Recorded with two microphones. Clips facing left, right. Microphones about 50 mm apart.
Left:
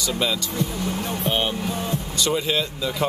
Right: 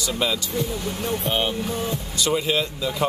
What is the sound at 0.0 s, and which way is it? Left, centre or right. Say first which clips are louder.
Speech: even; centre.